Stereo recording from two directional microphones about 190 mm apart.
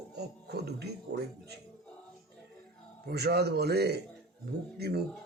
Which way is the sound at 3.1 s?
60° right (ahead or behind).